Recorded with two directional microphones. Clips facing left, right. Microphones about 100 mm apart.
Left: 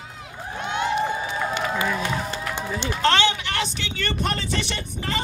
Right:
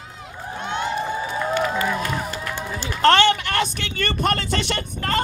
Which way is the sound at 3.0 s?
50° right (ahead or behind).